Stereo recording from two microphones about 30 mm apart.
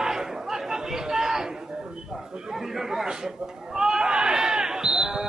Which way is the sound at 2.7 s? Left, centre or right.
Centre.